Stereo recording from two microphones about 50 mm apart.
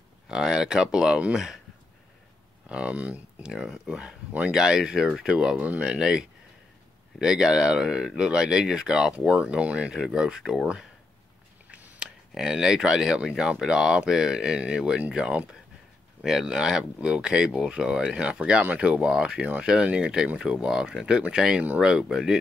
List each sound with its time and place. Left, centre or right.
0.3 s speech: centre
2.7 s speech: right
3.4 s speech: centre
5.6 s speech: right
5.9 s speech: centre
12.0 s speech: centre
16.2 s speech: centre